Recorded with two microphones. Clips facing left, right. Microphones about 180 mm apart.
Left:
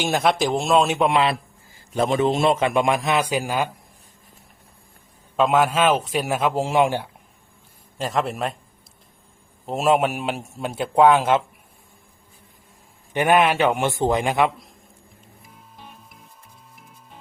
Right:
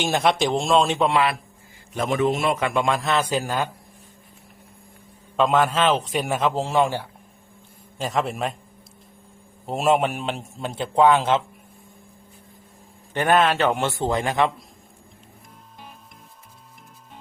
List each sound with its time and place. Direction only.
0.0 s a man's voice: centre (ahead or behind)
5.4 s a man's voice: 10° left (ahead or behind)
7.9 s a man's voice: centre (ahead or behind)
9.6 s a man's voice: centre (ahead or behind)
13.1 s a man's voice: 15° left (ahead or behind)